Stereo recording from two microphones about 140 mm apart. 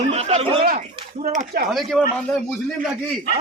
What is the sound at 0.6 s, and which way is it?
Speech, 65° right (ahead or behind).